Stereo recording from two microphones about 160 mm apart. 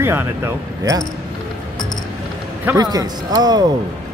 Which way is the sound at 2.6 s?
20° right (ahead or behind).